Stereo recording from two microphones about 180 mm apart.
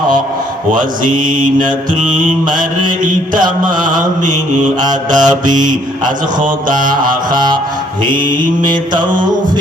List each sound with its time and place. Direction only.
0.7 s mantra: 50° right (ahead or behind)
6.7 s mantra: 50° right (ahead or behind)
8.7 s mantra: 25° right (ahead or behind)